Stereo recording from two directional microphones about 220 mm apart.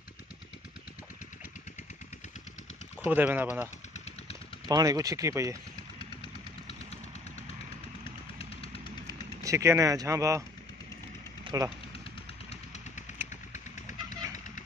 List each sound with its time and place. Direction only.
3.0 s speech: 10° right (ahead or behind)
3.9 s a sound: 30° left (ahead or behind)
4.6 s speech: 15° right (ahead or behind)
8.4 s jackhammer: 25° left (ahead or behind)
9.0 s speech: 15° right (ahead or behind)
11.4 s speech: 15° right (ahead or behind)